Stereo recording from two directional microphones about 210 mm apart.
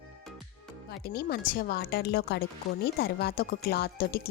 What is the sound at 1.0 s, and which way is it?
A woman's voice, 50° left (ahead or behind).